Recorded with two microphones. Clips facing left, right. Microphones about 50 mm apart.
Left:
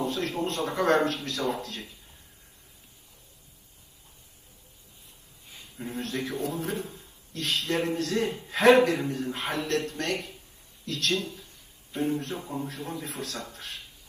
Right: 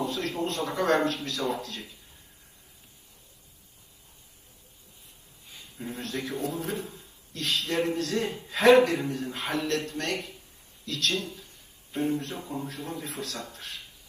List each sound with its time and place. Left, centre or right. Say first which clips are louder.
0.0 s a man's voice: left 1 dB; left
5.8 s a man's voice: left 2 dB; left